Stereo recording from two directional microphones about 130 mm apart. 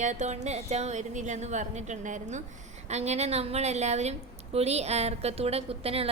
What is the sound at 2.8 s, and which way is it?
A woman's voice, 60° right (ahead or behind).